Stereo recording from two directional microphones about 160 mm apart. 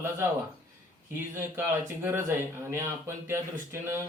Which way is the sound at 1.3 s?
15° right (ahead or behind).